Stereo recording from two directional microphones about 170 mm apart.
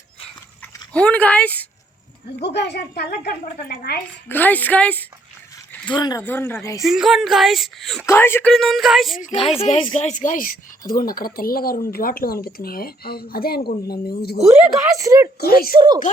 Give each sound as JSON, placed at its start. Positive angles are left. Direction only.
{"t": 0.6, "sound": "speech", "side_deg": 10}
{"t": 2.4, "sound": "a woman's voice", "side_deg": 80}
{"t": 4.3, "sound": "speech", "side_deg": 10}
{"t": 5.9, "sound": "speech", "side_deg": 25}
{"t": 6.2, "sound": "speech", "side_deg": 10}
{"t": 6.8, "sound": "speech", "side_deg": 0}
{"t": 8.0, "sound": "speech", "side_deg": 15}
{"t": 8.5, "sound": "speech", "side_deg": 0}
{"t": 9.6, "sound": "speech", "side_deg": 40}
{"t": 14.4, "sound": "speech", "side_deg": -20}
{"t": 15.4, "sound": "speech", "side_deg": 65}
{"t": 15.7, "sound": "speech", "side_deg": -30}